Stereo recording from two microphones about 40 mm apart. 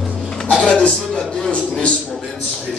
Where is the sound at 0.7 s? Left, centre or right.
Left.